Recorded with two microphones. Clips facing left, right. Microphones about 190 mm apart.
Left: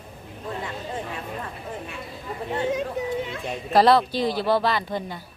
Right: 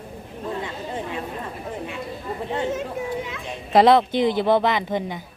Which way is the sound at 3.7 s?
20° right (ahead or behind).